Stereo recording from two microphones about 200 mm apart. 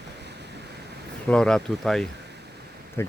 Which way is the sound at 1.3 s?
5° left (ahead or behind).